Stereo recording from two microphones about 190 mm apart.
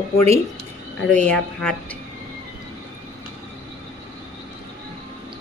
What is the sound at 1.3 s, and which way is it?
Speech, 5° left (ahead or behind).